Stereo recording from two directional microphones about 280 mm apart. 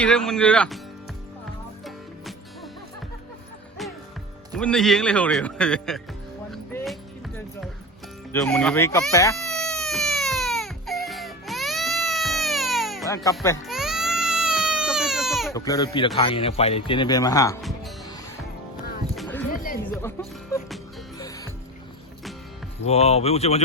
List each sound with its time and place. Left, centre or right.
0.0 s a man's voice: centre
4.5 s a man's voice: centre
6.5 s music: centre
8.3 s baby cry: centre
13.4 s a man's voice: centre
13.7 s baby cry: centre
15.5 s a man's voice: centre
17.6 s music: centre
19.1 s a sound: centre
19.9 s a man's voice: centre
21.2 s music: centre
22.9 s speech: left